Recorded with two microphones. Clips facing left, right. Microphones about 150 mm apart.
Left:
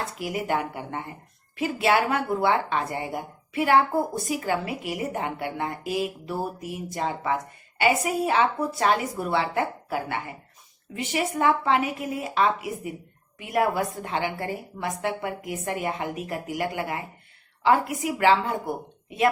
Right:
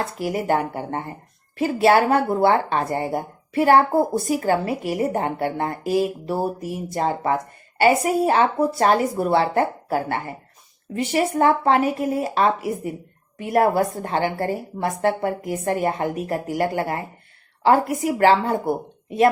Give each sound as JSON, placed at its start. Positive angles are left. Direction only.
{"t": 0.0, "sound": "a woman's voice", "side_deg": -35}